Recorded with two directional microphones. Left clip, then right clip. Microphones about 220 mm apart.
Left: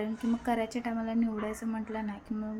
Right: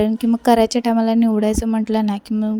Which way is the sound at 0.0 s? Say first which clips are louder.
Right 16 dB; 45° right (ahead or behind).